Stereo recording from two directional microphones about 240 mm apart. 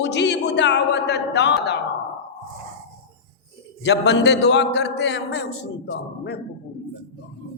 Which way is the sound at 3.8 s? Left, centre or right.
Left.